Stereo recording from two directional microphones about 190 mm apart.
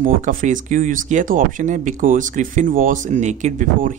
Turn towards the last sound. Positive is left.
turn(degrees=-40)  # may be behind; listen again after turning